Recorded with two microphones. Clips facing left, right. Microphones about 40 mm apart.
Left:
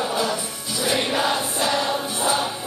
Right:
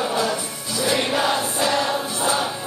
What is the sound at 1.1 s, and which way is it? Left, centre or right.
Choir, centre.